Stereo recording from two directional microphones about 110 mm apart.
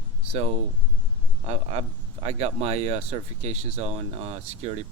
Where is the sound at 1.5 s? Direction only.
70° right (ahead or behind).